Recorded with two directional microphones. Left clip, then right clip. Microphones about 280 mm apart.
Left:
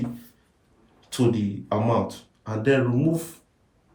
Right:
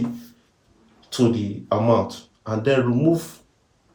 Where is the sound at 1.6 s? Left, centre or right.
Centre.